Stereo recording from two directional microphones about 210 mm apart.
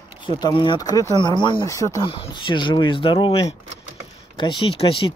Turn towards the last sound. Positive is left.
turn(degrees=25)  # may be behind; listen again after turning